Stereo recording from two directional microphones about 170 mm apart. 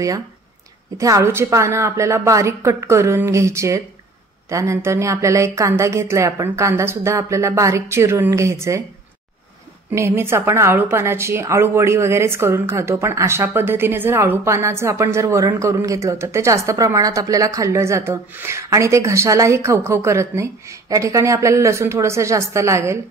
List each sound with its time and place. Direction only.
0.9 s a woman's voice: 20° right (ahead or behind)
9.9 s a woman's voice: 15° right (ahead or behind)